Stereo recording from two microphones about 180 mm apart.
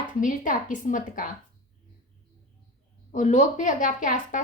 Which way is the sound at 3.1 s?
45° left (ahead or behind).